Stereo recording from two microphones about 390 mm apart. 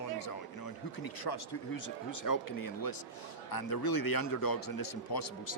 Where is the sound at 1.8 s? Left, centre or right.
Left.